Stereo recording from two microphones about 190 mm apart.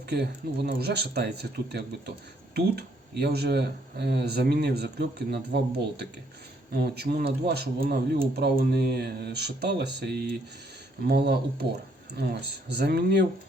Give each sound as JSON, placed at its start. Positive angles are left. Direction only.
{"t": 0.1, "sound": "speech", "side_deg": -60}